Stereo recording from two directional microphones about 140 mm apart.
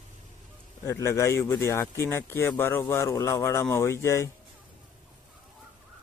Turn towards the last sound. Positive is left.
turn(degrees=20)  # may be behind; listen again after turning